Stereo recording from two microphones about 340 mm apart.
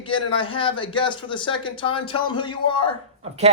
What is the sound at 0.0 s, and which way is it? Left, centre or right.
Speech, centre.